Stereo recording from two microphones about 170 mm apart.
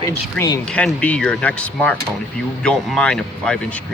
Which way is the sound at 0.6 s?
5° left (ahead or behind).